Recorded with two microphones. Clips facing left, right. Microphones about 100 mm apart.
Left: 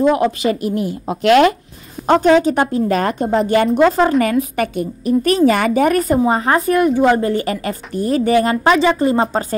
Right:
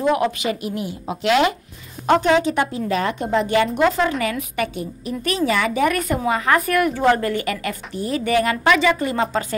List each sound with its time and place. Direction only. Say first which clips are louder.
0.1 s a woman's voice: left 4 dB; 35° left (ahead or behind); by 1.5 s 50° left (ahead or behind)
2.0 s a woman's voice: left 4 dB; 40° left (ahead or behind); by 7.3 s 20° left (ahead or behind)
7.3 s a woman's voice: left 4 dB; 35° left (ahead or behind)
7.9 s a woman's voice: left 6 dB; 45° left (ahead or behind)